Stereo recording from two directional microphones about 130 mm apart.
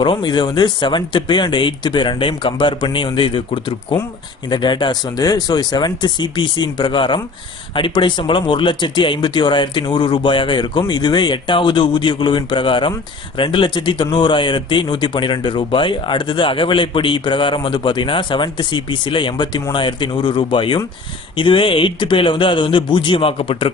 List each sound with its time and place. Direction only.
0.0 s speech: 35° left (ahead or behind)